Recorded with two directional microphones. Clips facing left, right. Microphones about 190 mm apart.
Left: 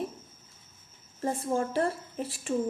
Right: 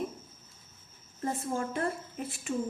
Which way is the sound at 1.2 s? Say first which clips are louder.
Left 4 dB; 30° left (ahead or behind).